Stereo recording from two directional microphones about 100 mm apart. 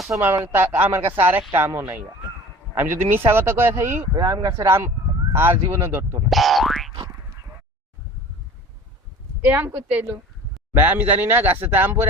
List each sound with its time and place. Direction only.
0.1 s a man's voice: 20° right (ahead or behind)
4.1 s speech: 35° right (ahead or behind)
4.6 s a man's voice: 25° right (ahead or behind)
6.2 s boing: centre (ahead or behind)
9.4 s a man's voice: 20° right (ahead or behind)